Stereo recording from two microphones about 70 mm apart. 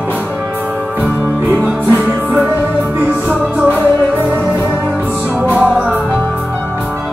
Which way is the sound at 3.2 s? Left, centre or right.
Right.